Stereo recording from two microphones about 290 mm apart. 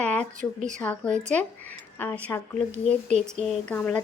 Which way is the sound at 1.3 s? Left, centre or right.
Centre.